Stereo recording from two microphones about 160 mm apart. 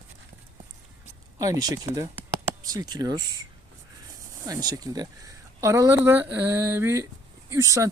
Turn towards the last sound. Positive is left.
turn(degrees=-20)  # may be behind; listen again after turning